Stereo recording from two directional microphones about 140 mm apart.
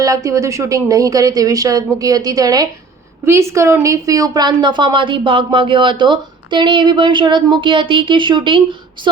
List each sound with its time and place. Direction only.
0.0 s a woman's voice: 25° right (ahead or behind)